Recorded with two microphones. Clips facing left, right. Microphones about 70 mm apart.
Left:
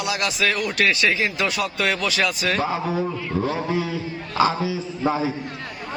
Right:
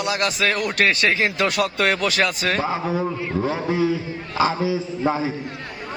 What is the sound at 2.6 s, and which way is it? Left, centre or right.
A man's voice, right.